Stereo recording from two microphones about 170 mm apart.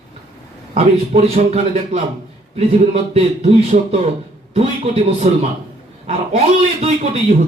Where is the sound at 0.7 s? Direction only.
35° right (ahead or behind).